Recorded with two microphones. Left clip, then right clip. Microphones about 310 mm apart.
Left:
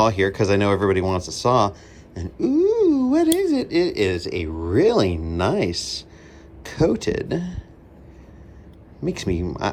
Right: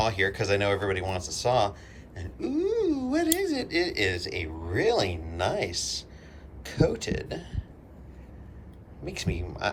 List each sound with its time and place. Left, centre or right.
0.0 s speech: centre
9.0 s speech: centre